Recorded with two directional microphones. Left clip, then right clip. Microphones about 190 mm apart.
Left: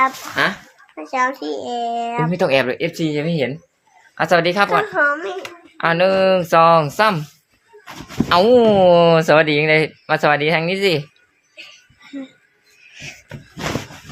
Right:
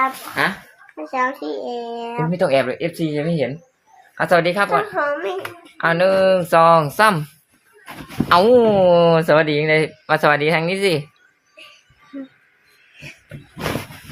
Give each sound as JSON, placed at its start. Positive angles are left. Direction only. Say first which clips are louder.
{"t": 0.4, "sound": "speech", "louder": "left 2 dB", "side_deg": 25}
{"t": 1.1, "sound": "speech", "louder": "left 2 dB", "side_deg": 50}
{"t": 2.3, "sound": "speech", "louder": "even", "side_deg": 25}
{"t": 5.7, "sound": "speech", "louder": "even", "side_deg": 15}
{"t": 6.9, "sound": "speech", "louder": "right 1 dB", "side_deg": 0}
{"t": 8.3, "sound": "speech", "louder": "even", "side_deg": 0}